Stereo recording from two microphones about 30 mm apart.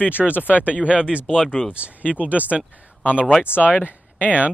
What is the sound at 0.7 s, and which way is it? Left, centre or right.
Speech, right.